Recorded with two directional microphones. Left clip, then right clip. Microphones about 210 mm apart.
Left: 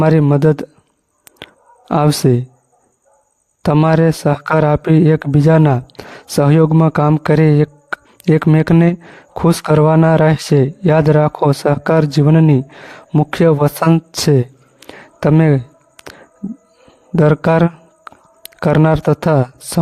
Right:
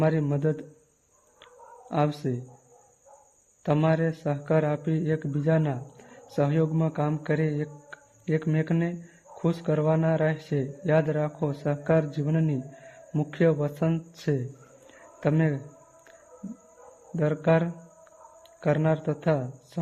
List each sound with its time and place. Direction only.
0.0 s speech: 50° left (ahead or behind)
1.9 s speech: 55° left (ahead or behind)
3.6 s speech: 50° left (ahead or behind)
14.8 s a sound: 50° left (ahead or behind)
17.2 s speech: 50° left (ahead or behind)